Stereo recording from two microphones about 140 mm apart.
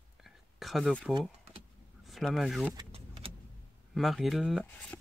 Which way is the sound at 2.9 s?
45° right (ahead or behind).